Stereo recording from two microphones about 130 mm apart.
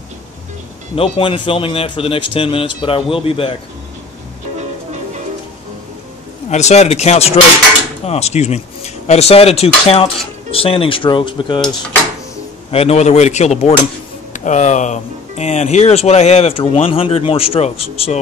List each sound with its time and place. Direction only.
0.9 s speech: 45° left (ahead or behind)
6.5 s speech: 60° left (ahead or behind); by 11.6 s 40° left (ahead or behind)
12.7 s speech: 55° left (ahead or behind)
14.3 s speech: 70° left (ahead or behind); by 18.1 s 50° left (ahead or behind)